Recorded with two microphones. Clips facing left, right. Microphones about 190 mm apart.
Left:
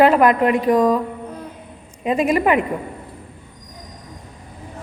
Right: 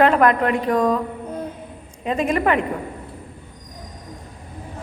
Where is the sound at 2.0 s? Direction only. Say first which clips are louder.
Left 3 dB; 10° left (ahead or behind).